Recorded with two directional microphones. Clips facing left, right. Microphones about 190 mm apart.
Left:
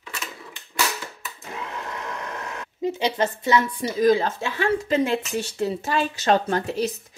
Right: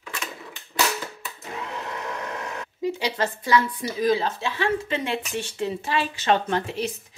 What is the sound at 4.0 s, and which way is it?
Speech, 50° left (ahead or behind).